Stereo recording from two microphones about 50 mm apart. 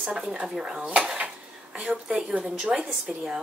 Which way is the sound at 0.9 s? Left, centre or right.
Centre.